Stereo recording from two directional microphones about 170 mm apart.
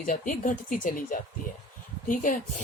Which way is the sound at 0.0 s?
50° left (ahead or behind).